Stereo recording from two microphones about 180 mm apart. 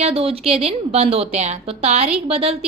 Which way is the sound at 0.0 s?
35° right (ahead or behind).